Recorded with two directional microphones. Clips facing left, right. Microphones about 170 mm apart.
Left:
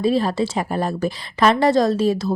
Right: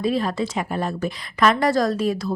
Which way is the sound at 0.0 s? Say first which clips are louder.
Left 3 dB; 30° left (ahead or behind).